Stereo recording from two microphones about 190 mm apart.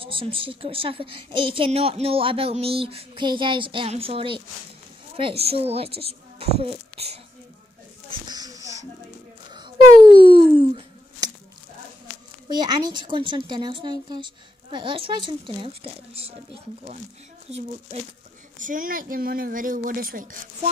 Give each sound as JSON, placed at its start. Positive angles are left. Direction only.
{"t": 0.0, "sound": "a woman's voice", "side_deg": -30}
{"t": 8.1, "sound": "a sound", "side_deg": -20}
{"t": 9.5, "sound": "speech", "side_deg": -25}
{"t": 12.4, "sound": "a woman's voice", "side_deg": -20}
{"t": 17.5, "sound": "speech", "side_deg": -35}
{"t": 18.6, "sound": "a woman's voice", "side_deg": -45}